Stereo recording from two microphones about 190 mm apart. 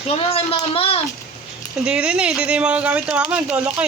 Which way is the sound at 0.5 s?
30° left (ahead or behind).